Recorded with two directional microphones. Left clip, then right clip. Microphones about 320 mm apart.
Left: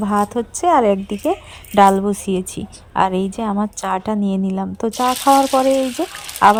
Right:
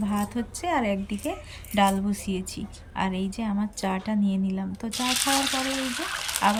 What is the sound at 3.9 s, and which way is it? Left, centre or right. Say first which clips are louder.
Speech: left 10 dB; left.